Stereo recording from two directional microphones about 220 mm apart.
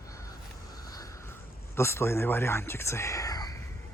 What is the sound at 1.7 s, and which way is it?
Speech, 10° left (ahead or behind).